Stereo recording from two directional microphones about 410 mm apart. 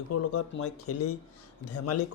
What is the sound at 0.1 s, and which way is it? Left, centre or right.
A man's voice, left.